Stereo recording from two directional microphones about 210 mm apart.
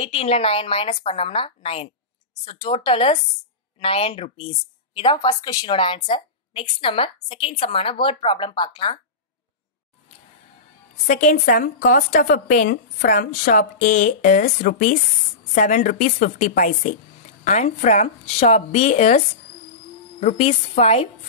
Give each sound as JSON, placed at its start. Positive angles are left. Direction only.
{"t": 0.0, "sound": "a woman's voice", "side_deg": 30}
{"t": 11.1, "sound": "a woman's voice", "side_deg": 35}